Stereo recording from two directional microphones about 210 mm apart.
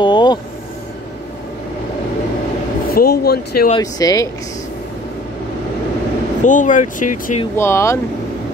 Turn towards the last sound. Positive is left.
turn(degrees=15)  # may be behind; listen again after turning